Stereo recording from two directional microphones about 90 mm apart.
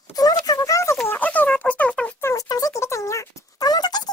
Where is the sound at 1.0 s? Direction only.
20° left (ahead or behind).